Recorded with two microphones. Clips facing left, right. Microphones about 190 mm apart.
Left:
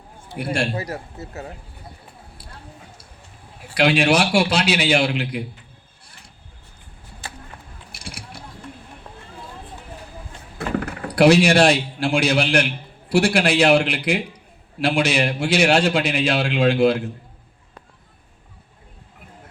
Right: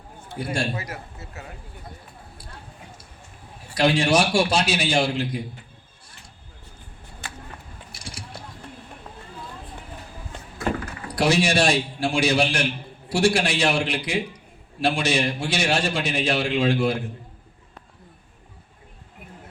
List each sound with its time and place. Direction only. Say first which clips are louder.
0.3 s a man's voice: left 3 dB; 65° left (ahead or behind)
0.8 s speech: left 6 dB; 35° left (ahead or behind)
3.8 s a man's voice: left 2 dB; 65° left (ahead or behind)
7.9 s a sound: left 3 dB; 65° left (ahead or behind)
10.6 s a man's voice: left 3 dB; 60° left (ahead or behind)